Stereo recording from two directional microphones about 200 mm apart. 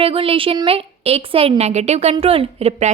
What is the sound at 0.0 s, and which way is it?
A woman's voice, 30° right (ahead or behind).